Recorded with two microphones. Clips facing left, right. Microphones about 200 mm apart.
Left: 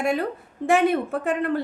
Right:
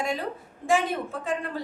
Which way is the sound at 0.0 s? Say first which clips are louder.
Left 6 dB; 60° left (ahead or behind).